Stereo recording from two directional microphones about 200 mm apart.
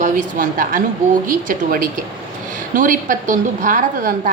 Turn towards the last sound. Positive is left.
turn(degrees=-40)  # may be behind; listen again after turning